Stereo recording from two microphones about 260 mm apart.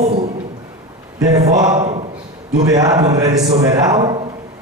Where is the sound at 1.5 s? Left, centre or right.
Centre.